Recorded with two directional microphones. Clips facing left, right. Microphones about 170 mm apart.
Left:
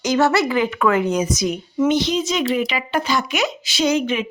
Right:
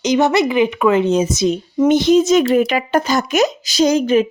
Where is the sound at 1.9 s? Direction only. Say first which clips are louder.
Right 10 dB; 50° right (ahead or behind).